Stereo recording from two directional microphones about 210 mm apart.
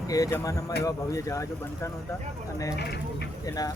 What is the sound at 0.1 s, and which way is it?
Speech, 15° left (ahead or behind).